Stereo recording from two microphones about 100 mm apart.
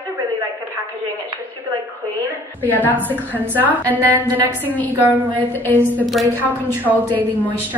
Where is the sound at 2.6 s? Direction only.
15° left (ahead or behind).